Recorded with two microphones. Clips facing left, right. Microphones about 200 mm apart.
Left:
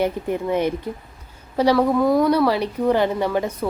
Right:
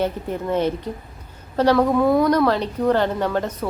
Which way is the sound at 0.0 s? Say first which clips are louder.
Left 2 dB; 10° left (ahead or behind).